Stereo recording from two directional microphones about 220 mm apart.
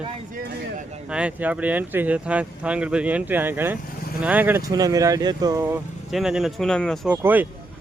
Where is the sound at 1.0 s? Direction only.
5° right (ahead or behind).